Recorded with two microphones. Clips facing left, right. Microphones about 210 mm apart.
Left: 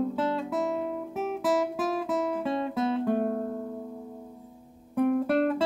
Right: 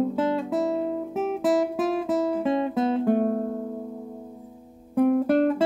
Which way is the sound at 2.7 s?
35° right (ahead or behind).